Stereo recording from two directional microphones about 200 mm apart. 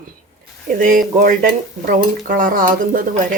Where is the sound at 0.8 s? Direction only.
45° right (ahead or behind).